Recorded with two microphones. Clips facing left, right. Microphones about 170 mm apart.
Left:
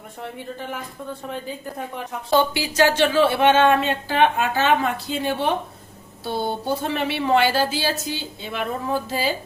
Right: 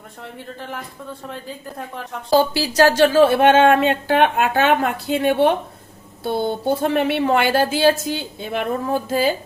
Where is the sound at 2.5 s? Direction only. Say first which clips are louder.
Right 3 dB; 40° right (ahead or behind).